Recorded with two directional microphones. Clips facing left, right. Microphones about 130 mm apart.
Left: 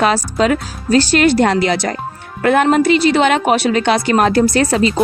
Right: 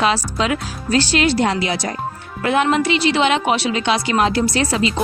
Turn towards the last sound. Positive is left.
turn(degrees=45)  # may be behind; listen again after turning